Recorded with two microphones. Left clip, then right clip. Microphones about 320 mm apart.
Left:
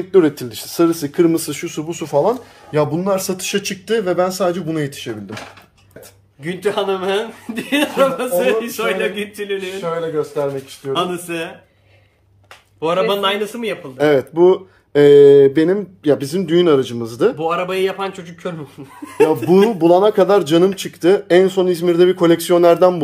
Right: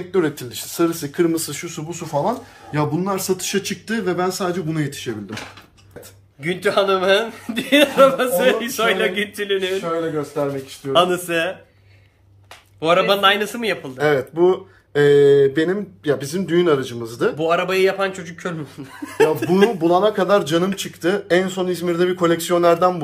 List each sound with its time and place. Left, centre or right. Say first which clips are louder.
0.1 s speech: left 7 dB; left
6.4 s speech: right 1 dB; centre
10.1 s speech: left 3 dB; left
10.9 s speech: right 4 dB; centre
12.8 s speech: right 1 dB; centre
13.9 s speech: left 5 dB; left
17.4 s speech: right 1 dB; centre
19.5 s speech: left 4 dB; left